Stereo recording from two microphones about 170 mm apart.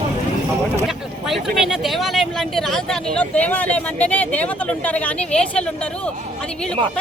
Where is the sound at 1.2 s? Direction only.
Centre (ahead or behind).